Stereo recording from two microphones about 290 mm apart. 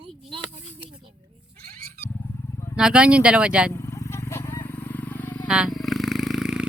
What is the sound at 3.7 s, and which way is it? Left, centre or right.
Vehicle, centre.